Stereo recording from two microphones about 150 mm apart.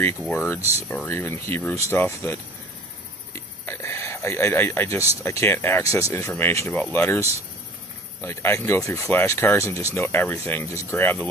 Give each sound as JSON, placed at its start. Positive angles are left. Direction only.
{"t": 0.2, "sound": "speech", "side_deg": 0}
{"t": 0.9, "sound": "speech", "side_deg": 15}
{"t": 3.3, "sound": "a sound", "side_deg": 15}
{"t": 5.2, "sound": "speech", "side_deg": 20}